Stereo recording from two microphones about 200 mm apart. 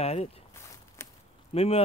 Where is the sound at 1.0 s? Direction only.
15° left (ahead or behind).